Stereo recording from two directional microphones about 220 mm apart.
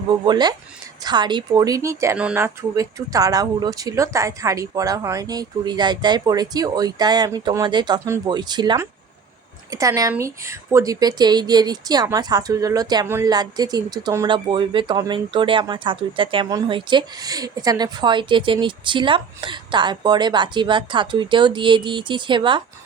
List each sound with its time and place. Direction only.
0.3 s speech: 20° right (ahead or behind)